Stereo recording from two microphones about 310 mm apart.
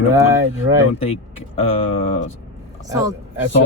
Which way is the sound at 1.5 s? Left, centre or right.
Centre.